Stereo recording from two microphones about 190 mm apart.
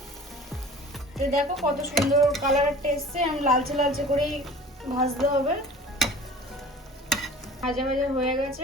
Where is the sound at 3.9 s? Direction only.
Centre (ahead or behind).